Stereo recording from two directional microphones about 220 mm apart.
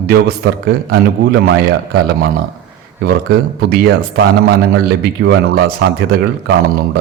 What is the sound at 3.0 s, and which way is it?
Speech, 45° right (ahead or behind).